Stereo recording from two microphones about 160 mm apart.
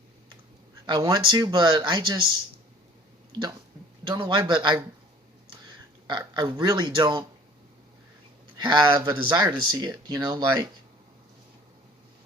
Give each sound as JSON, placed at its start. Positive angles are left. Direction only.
{"t": 0.9, "sound": "speech", "side_deg": -25}
{"t": 4.0, "sound": "speech", "side_deg": -30}
{"t": 6.1, "sound": "speech", "side_deg": -30}
{"t": 8.5, "sound": "speech", "side_deg": -30}